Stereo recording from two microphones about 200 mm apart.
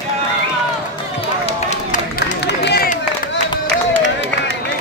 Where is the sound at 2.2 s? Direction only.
55° left (ahead or behind).